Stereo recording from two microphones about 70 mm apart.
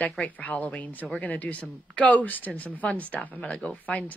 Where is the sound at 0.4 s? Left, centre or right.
Left.